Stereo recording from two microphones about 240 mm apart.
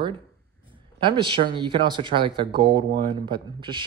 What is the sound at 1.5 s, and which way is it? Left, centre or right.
Speech, right.